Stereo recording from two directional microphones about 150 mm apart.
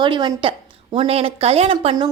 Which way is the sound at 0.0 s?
30° right (ahead or behind).